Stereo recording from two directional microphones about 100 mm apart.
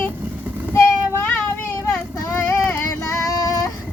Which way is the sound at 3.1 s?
35° left (ahead or behind).